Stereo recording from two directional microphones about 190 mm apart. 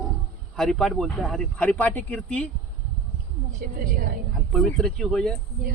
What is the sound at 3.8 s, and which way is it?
Speech, 45° right (ahead or behind).